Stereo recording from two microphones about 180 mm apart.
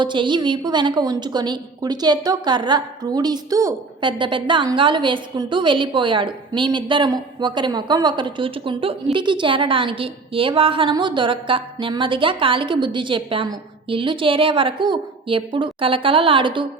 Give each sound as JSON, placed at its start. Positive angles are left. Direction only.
{"t": 0.0, "sound": "a woman's voice", "side_deg": -25}